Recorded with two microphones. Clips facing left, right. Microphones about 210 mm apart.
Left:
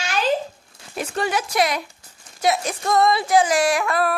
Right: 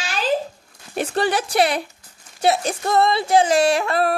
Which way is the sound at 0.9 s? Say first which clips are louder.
Right 3 dB; 35° right (ahead or behind).